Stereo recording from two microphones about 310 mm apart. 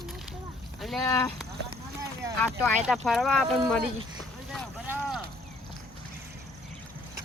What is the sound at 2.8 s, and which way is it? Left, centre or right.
Speech, centre.